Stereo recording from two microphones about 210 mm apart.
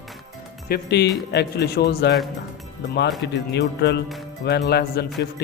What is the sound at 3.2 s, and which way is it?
Speech, 55° left (ahead or behind).